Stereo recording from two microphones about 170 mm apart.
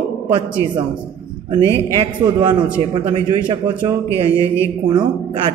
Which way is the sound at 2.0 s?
25° right (ahead or behind).